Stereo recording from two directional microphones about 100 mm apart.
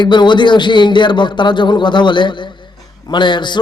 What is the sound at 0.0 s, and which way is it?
A man's voice, 50° left (ahead or behind).